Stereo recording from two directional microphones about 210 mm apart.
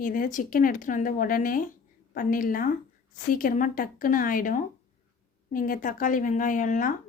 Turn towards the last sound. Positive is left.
turn(degrees=40)  # may be behind; listen again after turning